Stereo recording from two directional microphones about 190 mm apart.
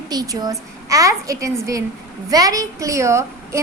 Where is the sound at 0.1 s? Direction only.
20° right (ahead or behind).